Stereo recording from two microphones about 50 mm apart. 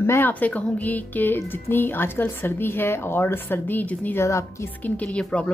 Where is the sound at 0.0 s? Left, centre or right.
Left.